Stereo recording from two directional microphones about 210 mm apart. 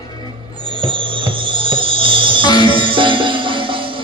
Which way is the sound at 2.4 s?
20° left (ahead or behind).